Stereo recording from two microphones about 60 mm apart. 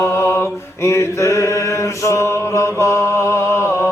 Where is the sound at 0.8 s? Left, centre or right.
Left.